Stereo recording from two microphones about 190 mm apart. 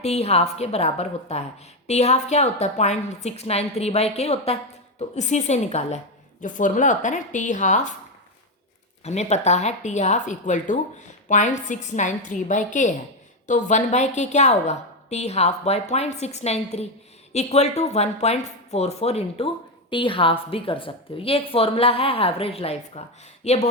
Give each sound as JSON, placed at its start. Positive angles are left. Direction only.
{"t": 0.0, "sound": "a woman's voice", "side_deg": 35}
{"t": 9.0, "sound": "a woman's voice", "side_deg": 35}